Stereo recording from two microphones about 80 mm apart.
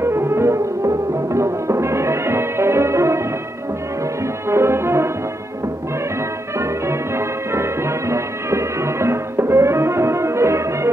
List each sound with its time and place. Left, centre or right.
0.0 s music: right
4.5 s music: right
6.6 s music: right